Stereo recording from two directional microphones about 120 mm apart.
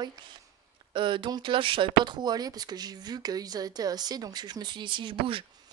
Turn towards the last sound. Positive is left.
turn(degrees=-45)  # may be behind; listen again after turning